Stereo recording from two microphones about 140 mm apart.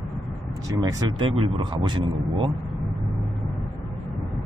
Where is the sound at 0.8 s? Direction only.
30° right (ahead or behind).